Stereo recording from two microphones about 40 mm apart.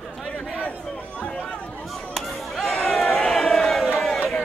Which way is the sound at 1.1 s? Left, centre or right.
Left.